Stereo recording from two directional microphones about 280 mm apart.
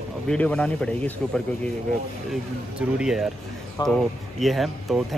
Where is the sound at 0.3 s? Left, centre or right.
Centre.